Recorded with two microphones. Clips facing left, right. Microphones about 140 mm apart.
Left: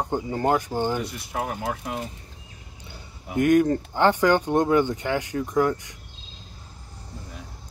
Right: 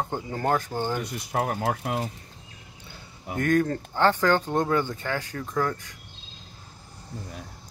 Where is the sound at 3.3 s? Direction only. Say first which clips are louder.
Left 5 dB; 15° left (ahead or behind).